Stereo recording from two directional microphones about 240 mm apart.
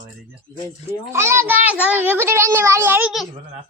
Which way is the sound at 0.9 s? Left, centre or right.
Centre.